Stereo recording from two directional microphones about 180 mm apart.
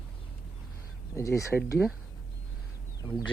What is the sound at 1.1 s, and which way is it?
Speech, 15° left (ahead or behind).